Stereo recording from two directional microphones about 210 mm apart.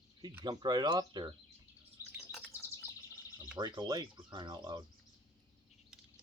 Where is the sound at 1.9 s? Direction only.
5° right (ahead or behind).